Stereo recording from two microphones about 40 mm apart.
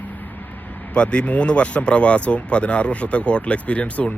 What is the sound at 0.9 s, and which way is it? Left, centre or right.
Speech, left.